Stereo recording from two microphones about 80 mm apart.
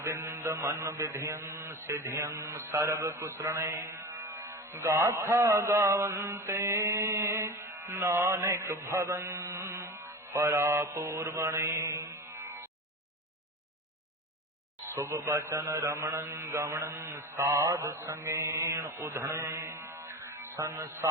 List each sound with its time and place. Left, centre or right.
0.0 s mantra: right
14.8 s mantra: right